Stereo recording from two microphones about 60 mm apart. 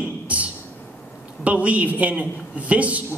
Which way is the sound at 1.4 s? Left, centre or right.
Right.